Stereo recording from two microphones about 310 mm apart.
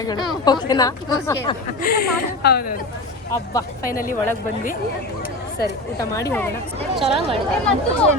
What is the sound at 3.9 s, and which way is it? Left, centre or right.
Speech, left.